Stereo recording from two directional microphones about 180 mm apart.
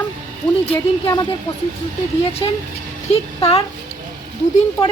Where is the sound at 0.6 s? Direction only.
25° left (ahead or behind).